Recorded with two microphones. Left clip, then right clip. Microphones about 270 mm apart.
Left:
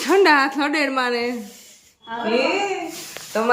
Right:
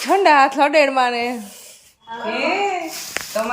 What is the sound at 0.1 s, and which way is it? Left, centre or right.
A woman's voice, centre.